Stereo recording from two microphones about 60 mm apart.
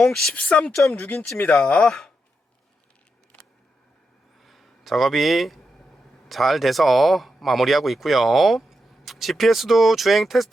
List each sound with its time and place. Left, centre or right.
0.0 s speech: centre
0.3 s speech: centre
4.4 s a sound: centre
6.2 s speech: centre